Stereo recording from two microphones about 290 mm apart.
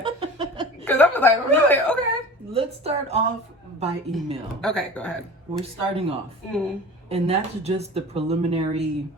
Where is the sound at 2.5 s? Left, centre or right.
Right.